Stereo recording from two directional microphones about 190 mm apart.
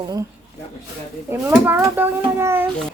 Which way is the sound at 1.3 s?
10° right (ahead or behind).